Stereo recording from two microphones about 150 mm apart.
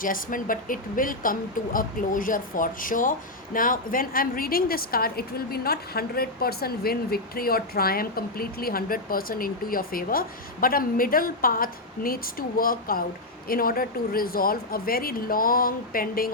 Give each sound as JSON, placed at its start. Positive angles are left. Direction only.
{"t": 0.0, "sound": "speech", "side_deg": 65}